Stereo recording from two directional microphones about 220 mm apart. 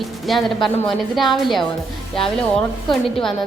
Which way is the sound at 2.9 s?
Centre (ahead or behind).